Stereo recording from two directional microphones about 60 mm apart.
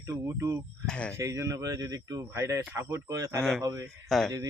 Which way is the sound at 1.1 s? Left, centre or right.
Right.